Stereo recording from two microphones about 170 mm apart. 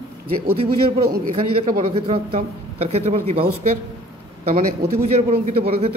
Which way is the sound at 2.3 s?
35° right (ahead or behind).